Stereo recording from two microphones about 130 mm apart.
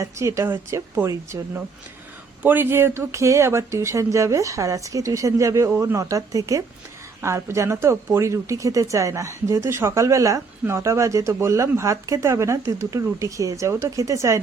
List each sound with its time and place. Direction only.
0.0 s speech: 25° right (ahead or behind)